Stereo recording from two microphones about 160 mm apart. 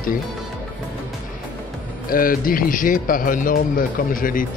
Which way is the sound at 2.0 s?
65° left (ahead or behind).